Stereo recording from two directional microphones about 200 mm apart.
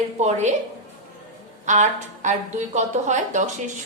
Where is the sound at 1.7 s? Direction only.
35° right (ahead or behind).